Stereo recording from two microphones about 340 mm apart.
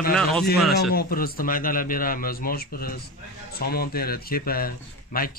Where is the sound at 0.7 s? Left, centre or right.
Left.